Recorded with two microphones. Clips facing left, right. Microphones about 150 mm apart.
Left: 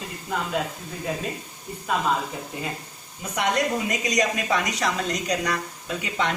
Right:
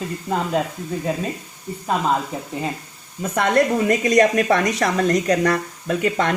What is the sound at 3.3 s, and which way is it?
A woman's voice, 55° right (ahead or behind).